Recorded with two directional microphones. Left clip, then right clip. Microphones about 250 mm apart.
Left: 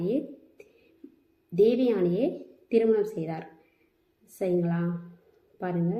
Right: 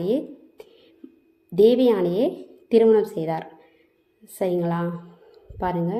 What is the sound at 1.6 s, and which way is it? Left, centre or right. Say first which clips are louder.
Speech: right 6 dB; right.